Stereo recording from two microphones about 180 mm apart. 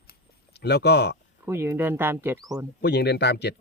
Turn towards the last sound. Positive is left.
turn(degrees=70)  # may be behind; listen again after turning